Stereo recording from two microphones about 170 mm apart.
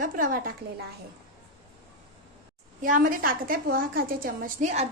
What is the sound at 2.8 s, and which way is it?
A woman's voice, 55° right (ahead or behind).